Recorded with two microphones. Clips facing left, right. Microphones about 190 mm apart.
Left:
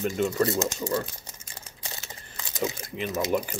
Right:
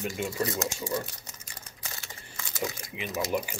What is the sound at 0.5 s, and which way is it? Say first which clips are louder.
Speech: left 4 dB; 30° left (ahead or behind).